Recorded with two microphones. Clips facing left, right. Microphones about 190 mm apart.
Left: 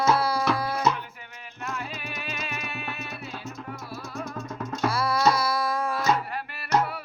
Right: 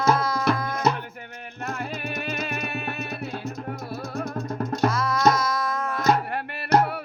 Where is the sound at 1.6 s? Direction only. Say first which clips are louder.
Right 4 dB; 55° right (ahead or behind).